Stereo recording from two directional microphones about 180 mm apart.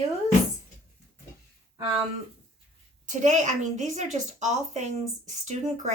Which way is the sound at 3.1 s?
45° right (ahead or behind).